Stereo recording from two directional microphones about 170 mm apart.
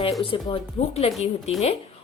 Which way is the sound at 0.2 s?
30° left (ahead or behind).